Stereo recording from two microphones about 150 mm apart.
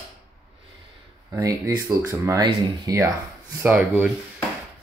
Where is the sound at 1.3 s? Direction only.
25° right (ahead or behind).